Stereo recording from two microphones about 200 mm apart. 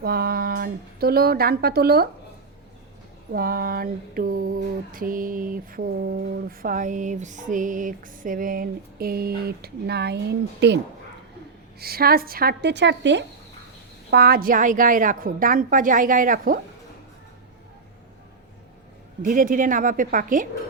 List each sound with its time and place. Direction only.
0.0 s a woman's voice: 50° right (ahead or behind)
3.3 s mantra: 45° right (ahead or behind)
11.8 s mantra: 50° right (ahead or behind)
14.1 s mantra: 50° right (ahead or behind)
19.2 s mantra: 45° right (ahead or behind)